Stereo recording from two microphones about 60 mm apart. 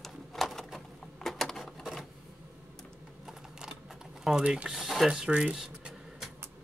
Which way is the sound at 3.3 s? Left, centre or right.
Centre.